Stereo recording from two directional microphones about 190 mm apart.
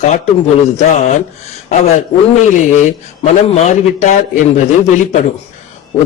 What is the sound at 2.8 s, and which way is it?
Speech, 35° left (ahead or behind).